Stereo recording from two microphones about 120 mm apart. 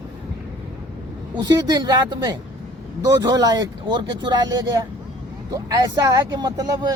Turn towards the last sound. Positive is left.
turn(degrees=-35)  # may be behind; listen again after turning